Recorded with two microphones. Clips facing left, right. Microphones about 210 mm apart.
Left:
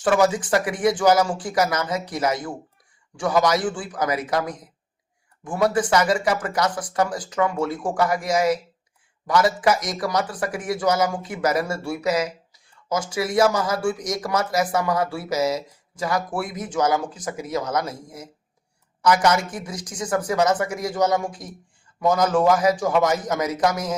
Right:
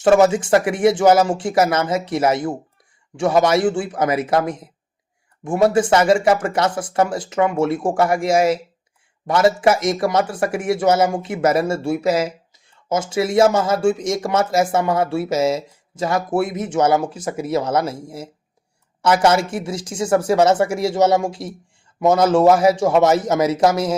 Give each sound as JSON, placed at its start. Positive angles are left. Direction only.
{"t": 0.0, "sound": "speech", "side_deg": -25}